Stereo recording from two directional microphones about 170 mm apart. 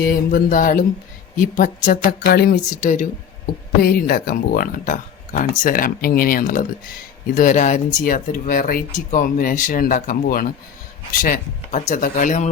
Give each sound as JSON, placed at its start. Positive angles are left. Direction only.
{"t": 0.0, "sound": "speech", "side_deg": 55}
{"t": 2.8, "sound": "speech", "side_deg": 45}
{"t": 3.8, "sound": "speech", "side_deg": 60}